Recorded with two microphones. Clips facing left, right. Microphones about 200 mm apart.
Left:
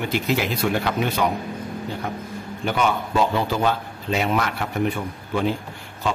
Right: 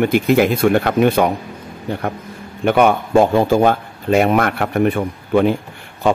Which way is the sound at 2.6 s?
60° right (ahead or behind).